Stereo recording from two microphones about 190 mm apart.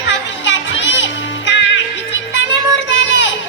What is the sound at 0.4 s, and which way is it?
Music, 70° left (ahead or behind).